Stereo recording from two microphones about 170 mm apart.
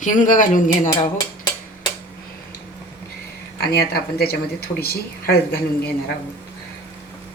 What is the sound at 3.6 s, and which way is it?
Speech, 65° left (ahead or behind).